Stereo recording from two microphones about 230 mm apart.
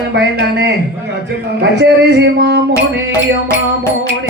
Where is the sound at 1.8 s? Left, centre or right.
Right.